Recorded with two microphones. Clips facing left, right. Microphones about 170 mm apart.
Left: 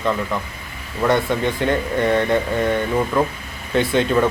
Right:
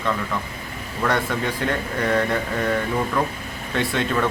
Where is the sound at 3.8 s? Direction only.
Centre (ahead or behind).